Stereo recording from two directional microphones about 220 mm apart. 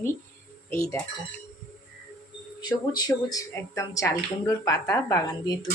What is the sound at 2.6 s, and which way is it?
Speech, 20° left (ahead or behind).